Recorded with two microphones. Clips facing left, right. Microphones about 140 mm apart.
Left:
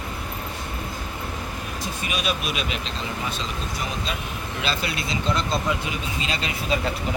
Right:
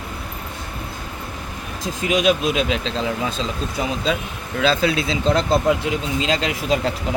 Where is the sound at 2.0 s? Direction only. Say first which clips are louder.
Right 11 dB; 90° right.